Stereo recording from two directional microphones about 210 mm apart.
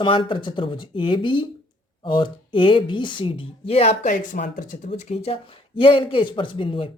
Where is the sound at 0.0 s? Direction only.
25° left (ahead or behind).